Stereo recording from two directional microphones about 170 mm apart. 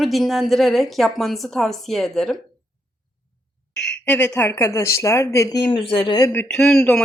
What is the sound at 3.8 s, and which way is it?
Speech, 5° left (ahead or behind).